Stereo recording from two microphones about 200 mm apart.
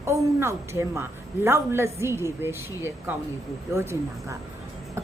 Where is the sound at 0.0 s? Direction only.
15° right (ahead or behind).